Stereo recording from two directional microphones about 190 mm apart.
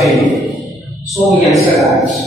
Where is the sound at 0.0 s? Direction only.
Centre (ahead or behind).